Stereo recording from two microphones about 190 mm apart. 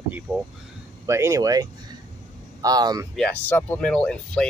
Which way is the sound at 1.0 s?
15° right (ahead or behind).